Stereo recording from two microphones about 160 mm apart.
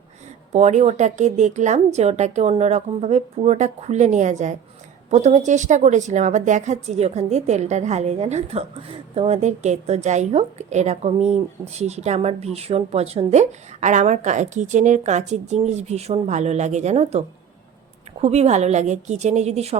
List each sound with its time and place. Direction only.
0.5 s a woman's voice: 45° right (ahead or behind)